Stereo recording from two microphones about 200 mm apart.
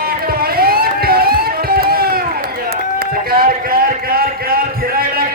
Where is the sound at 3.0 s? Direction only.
50° right (ahead or behind).